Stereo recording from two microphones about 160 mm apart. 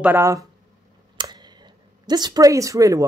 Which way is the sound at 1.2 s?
25° right (ahead or behind).